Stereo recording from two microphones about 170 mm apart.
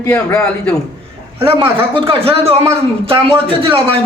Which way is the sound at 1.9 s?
30° right (ahead or behind).